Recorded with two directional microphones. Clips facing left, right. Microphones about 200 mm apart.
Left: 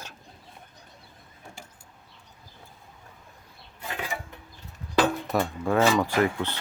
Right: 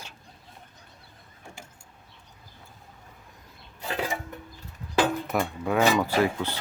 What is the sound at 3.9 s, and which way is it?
Music, 30° right (ahead or behind).